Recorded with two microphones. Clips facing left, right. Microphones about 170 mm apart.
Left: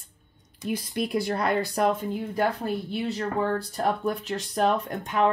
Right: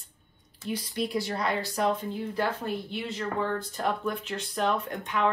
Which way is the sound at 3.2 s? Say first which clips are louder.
Left 2 dB; 35° left (ahead or behind).